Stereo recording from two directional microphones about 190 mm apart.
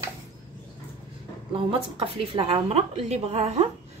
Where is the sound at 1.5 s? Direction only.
30° right (ahead or behind).